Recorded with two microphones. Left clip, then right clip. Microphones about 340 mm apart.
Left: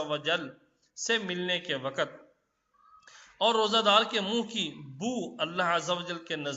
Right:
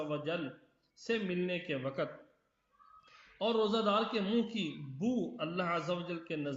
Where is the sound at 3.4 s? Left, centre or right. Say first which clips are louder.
Left 7 dB; left.